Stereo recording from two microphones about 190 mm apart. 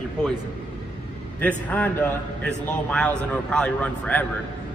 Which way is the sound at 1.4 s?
10° left (ahead or behind).